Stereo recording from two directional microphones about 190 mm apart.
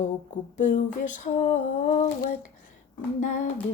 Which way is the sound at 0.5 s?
40° left (ahead or behind).